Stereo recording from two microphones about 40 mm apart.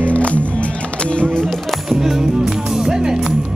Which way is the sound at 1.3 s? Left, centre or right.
Centre.